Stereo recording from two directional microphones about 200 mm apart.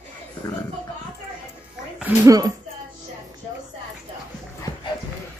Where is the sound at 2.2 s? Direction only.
15° right (ahead or behind).